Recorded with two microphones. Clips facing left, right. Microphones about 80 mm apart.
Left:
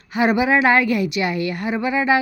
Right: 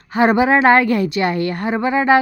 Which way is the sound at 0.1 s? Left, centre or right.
Right.